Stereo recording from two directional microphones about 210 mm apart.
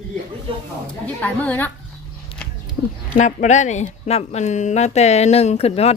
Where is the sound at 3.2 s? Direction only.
35° left (ahead or behind).